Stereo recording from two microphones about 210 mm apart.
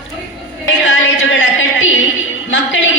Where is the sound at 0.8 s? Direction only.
65° left (ahead or behind).